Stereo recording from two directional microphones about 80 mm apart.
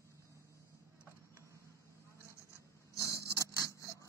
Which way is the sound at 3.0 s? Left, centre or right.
Left.